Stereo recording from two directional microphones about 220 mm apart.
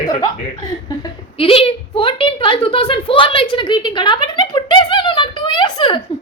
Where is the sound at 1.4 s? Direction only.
25° left (ahead or behind).